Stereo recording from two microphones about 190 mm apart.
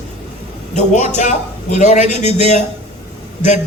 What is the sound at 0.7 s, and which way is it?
Speech, 40° left (ahead or behind).